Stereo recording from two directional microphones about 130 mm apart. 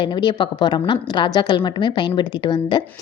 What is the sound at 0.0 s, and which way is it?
A woman's voice, 35° left (ahead or behind).